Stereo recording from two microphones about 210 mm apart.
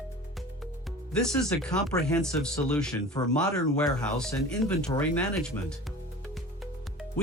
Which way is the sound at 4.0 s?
5° left (ahead or behind).